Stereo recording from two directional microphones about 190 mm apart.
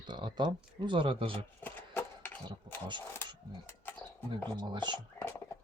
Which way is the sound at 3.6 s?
10° left (ahead or behind).